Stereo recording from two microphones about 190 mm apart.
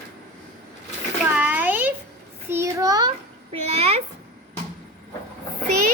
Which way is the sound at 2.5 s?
15° right (ahead or behind).